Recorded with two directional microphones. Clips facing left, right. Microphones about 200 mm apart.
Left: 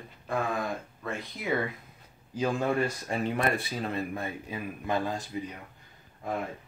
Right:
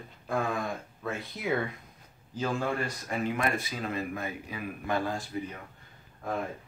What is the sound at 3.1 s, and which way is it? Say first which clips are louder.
Speech: left 1 dB; 30° left (ahead or behind).